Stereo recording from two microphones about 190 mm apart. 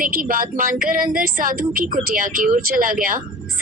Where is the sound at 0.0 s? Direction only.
50° right (ahead or behind).